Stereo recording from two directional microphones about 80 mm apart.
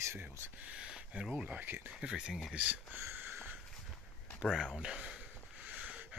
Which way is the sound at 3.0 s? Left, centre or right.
Right.